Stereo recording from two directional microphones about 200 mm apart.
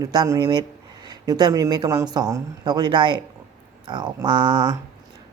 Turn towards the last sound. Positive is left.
turn(degrees=-20)  # may be behind; listen again after turning